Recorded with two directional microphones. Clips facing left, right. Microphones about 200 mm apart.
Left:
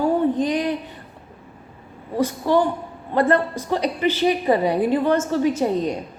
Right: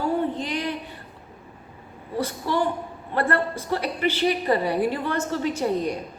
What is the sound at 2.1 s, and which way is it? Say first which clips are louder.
A woman's voice: left 6 dB; 15° left (ahead or behind).